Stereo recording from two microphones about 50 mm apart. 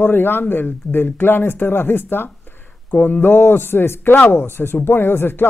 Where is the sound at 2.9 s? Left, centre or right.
Left.